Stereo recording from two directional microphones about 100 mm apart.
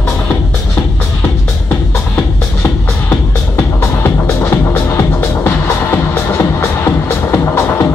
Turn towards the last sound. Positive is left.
turn(degrees=25)  # may be behind; listen again after turning